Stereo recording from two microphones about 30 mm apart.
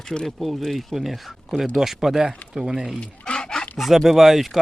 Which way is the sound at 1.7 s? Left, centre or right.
Centre.